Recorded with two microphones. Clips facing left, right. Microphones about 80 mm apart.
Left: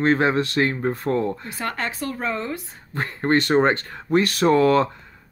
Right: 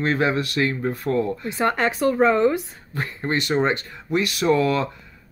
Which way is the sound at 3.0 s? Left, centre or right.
Left.